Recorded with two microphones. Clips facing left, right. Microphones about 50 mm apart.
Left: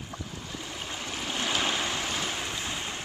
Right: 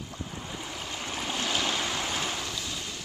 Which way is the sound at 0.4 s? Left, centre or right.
Right.